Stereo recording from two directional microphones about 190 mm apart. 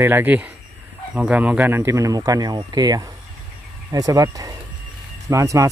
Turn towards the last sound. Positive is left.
turn(degrees=-15)  # may be behind; listen again after turning